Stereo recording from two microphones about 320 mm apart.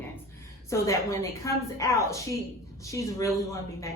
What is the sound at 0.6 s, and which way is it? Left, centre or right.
A woman's voice, centre.